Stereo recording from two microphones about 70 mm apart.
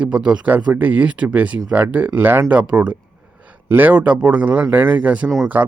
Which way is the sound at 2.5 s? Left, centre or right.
Centre.